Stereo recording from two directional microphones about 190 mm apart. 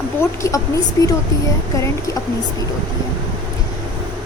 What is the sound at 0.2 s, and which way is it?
Speech, 15° left (ahead or behind).